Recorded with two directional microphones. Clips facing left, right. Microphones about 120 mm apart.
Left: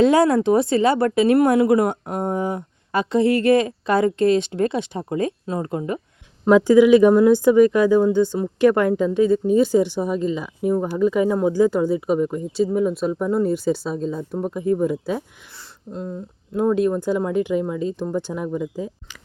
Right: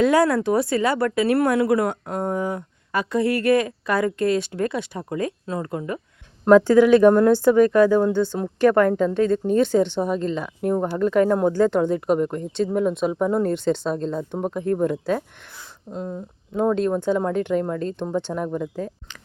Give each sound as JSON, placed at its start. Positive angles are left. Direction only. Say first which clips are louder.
{"t": 0.0, "sound": "speech", "louder": "left 2 dB", "side_deg": 20}
{"t": 6.4, "sound": "a woman's voice", "louder": "even", "side_deg": 10}
{"t": 15.9, "sound": "a woman's voice", "louder": "even", "side_deg": -5}
{"t": 16.6, "sound": "a woman's voice", "louder": "left 2 dB", "side_deg": 5}